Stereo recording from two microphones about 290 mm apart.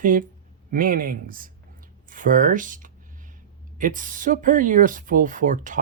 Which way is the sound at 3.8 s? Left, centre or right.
Right.